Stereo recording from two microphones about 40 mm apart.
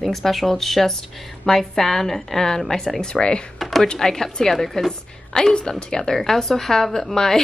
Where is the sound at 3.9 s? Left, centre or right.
Centre.